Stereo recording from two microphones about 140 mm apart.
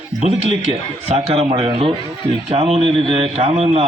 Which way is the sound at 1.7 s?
40° right (ahead or behind).